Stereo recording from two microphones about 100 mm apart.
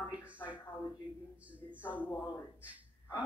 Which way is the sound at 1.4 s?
15° right (ahead or behind).